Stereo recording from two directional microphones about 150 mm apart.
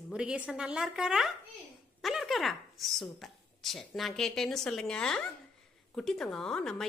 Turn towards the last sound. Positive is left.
turn(degrees=5)  # may be behind; listen again after turning